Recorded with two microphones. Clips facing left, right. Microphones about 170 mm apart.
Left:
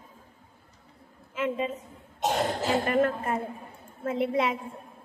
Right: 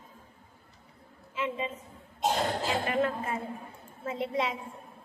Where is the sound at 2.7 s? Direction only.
50° left (ahead or behind).